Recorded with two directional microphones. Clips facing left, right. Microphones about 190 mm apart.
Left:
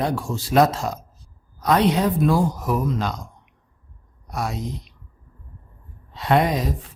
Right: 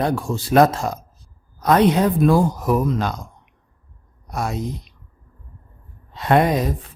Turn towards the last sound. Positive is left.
turn(degrees=-50)  # may be behind; listen again after turning